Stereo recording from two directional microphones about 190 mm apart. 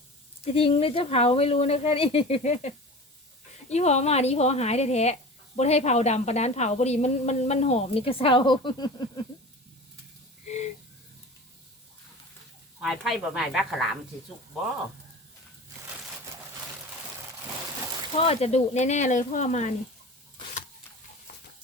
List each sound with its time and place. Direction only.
0.4 s a woman's voice: 30° left (ahead or behind)
12.8 s speech: centre (ahead or behind)
18.2 s a woman's voice: 30° left (ahead or behind)